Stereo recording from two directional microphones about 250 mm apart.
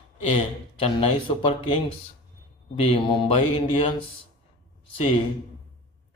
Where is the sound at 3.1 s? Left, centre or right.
Left.